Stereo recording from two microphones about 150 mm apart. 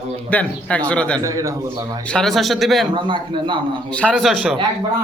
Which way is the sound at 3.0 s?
35° right (ahead or behind).